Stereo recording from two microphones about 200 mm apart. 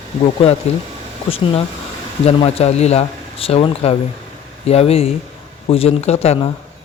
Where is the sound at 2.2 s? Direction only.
30° left (ahead or behind).